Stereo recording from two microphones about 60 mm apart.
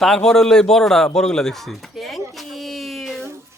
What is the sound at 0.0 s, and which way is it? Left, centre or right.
Speech, centre.